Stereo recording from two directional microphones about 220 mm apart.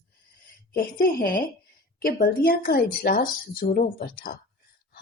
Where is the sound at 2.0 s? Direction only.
40° left (ahead or behind).